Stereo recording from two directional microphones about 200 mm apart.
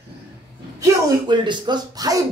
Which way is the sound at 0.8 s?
25° right (ahead or behind).